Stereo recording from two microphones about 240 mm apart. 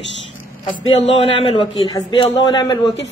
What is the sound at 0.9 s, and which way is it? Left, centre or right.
A man's voice, left.